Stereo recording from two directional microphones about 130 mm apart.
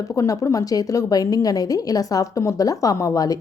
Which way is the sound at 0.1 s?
25° left (ahead or behind).